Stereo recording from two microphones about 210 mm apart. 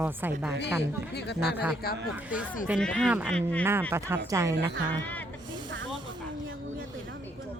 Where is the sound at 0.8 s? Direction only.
55° left (ahead or behind).